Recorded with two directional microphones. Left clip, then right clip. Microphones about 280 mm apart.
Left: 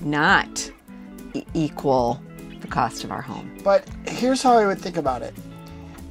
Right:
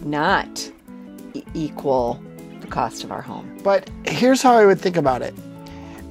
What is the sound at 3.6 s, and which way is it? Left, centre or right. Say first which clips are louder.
Speech: even; right.